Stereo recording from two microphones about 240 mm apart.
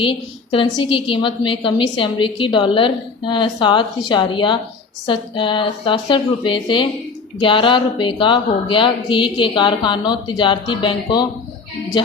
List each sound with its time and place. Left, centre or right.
0.0 s a woman's voice: left